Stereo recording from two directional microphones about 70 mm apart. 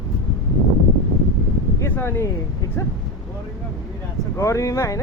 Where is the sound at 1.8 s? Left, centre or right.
Left.